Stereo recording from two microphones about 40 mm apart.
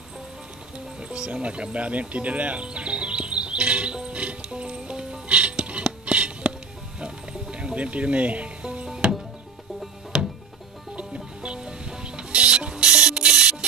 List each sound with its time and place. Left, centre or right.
0.7 s music: right
7.5 s speech: right
8.8 s music: centre
10.1 s music: centre
11.1 s ratchet: right